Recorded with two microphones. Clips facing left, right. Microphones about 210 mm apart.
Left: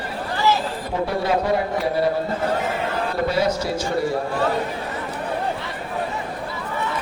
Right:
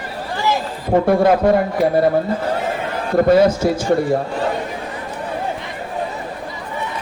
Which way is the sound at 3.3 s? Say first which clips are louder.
Right 11 dB; 50° right (ahead or behind).